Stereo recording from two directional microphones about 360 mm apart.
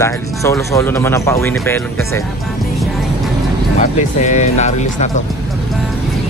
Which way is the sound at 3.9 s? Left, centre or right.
Centre.